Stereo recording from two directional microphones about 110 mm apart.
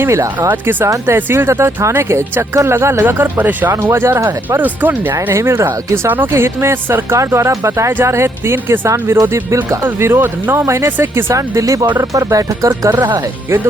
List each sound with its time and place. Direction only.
0.0 s speech: 25° right (ahead or behind)